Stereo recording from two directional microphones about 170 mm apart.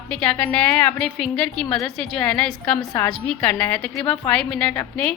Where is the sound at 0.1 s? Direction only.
5° left (ahead or behind).